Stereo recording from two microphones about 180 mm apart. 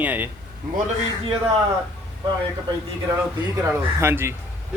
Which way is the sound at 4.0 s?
15° right (ahead or behind).